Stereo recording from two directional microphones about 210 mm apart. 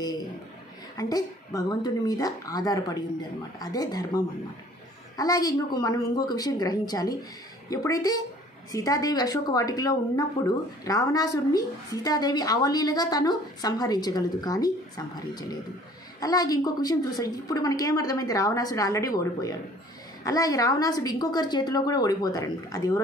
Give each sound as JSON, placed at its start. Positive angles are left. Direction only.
{"t": 0.9, "sound": "a woman's voice", "side_deg": 15}